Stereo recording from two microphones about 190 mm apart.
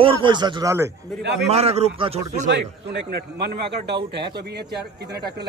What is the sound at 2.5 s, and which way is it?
A man's voice, 60° right (ahead or behind).